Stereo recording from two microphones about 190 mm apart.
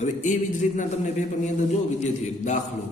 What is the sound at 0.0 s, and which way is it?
A man's voice, 40° left (ahead or behind).